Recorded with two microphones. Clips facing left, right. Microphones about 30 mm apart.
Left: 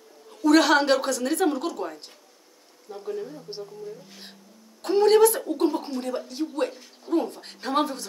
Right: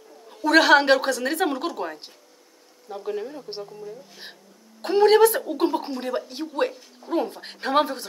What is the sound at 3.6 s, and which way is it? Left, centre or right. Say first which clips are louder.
Speech: right 1 dB; centre.